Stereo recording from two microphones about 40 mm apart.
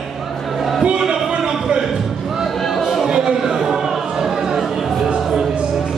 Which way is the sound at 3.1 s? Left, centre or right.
Centre.